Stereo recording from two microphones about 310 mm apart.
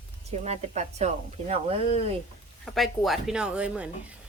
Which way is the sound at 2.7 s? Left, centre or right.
Centre.